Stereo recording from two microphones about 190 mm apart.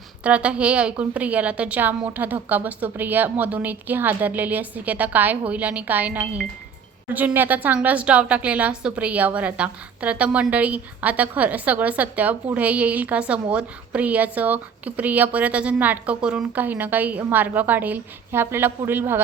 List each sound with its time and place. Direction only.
0.2 s a woman's voice: 5° right (ahead or behind)